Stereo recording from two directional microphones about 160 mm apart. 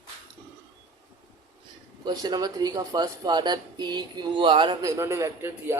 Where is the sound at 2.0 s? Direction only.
25° right (ahead or behind).